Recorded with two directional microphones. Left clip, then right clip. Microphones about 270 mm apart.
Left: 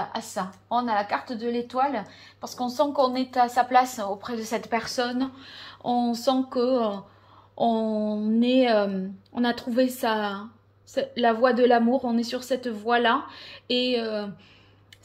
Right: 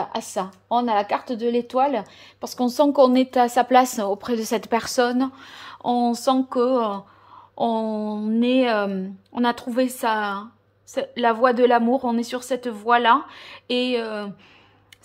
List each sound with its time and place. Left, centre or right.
0.0 s a woman's voice: right; by 14.3 s centre